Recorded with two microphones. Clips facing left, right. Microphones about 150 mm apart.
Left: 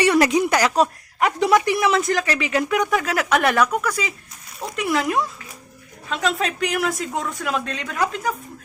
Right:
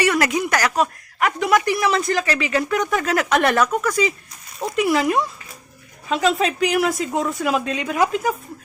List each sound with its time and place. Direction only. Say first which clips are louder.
0.0 s speech: left 3 dB; 20° left (ahead or behind)
0.8 s speech: left 1 dB; 30° left (ahead or behind)
1.8 s speech: even; centre (ahead or behind)
2.3 s speech: even; 15° left (ahead or behind); by 8.4 s 10° right (ahead or behind)